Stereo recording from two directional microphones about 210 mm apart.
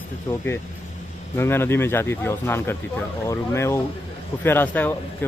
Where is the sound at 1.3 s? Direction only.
10° left (ahead or behind).